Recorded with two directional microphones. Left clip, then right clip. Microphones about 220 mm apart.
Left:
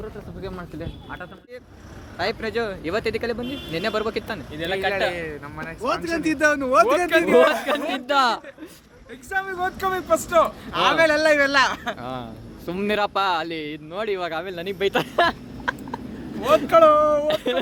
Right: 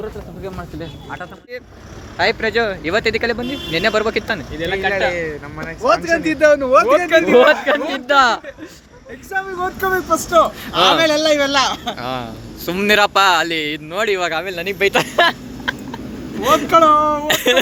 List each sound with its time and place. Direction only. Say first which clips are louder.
0.4 s speech: right 4 dB; 30° left (ahead or behind)
2.1 s speech: right 9 dB; centre (ahead or behind)
4.5 s speech: right 2 dB; 50° left (ahead or behind)
5.1 s speech: right 7 dB; centre (ahead or behind)
6.1 s speech: right 5 dB; 35° left (ahead or behind)
7.1 s speech: right 6 dB; centre (ahead or behind)